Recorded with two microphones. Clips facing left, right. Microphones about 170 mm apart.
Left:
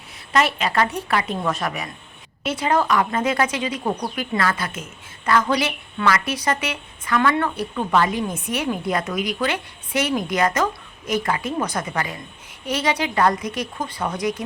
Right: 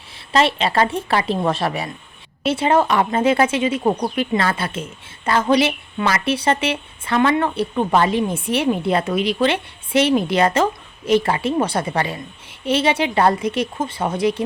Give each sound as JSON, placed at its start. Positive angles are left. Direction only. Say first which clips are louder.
{"t": 0.3, "sound": "speech", "louder": "right 3 dB", "side_deg": -25}